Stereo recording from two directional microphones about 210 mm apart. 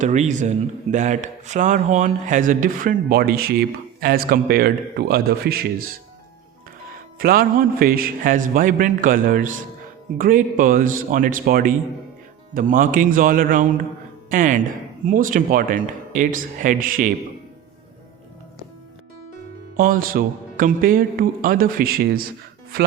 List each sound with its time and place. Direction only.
0.0 s a man's voice: 35° right (ahead or behind)
7.2 s a man's voice: 45° right (ahead or behind)
19.7 s a man's voice: 40° right (ahead or behind)